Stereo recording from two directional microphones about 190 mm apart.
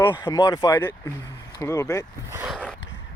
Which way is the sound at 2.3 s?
15° right (ahead or behind).